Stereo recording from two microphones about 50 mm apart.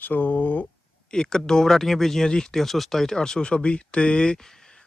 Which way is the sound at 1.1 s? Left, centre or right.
Centre.